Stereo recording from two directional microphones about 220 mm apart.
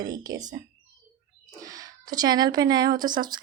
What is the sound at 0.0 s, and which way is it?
Speech, 15° right (ahead or behind).